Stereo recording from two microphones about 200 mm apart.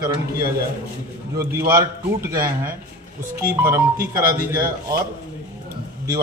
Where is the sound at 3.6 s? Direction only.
10° right (ahead or behind).